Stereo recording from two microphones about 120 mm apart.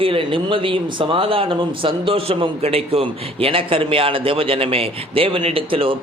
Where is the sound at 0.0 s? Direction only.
50° right (ahead or behind).